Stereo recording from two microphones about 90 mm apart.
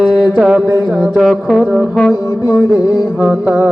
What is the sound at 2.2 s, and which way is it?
Music, 45° left (ahead or behind).